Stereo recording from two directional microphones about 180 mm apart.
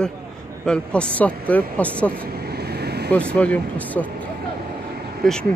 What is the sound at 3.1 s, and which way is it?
A man's voice, 5° left (ahead or behind).